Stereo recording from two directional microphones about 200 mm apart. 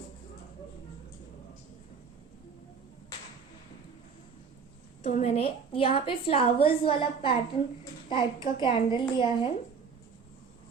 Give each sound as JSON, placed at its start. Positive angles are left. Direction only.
{"t": 5.0, "sound": "a woman's voice", "side_deg": 35}